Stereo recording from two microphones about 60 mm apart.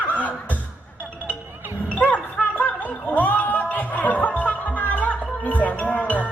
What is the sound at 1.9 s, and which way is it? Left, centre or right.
Gargling, left.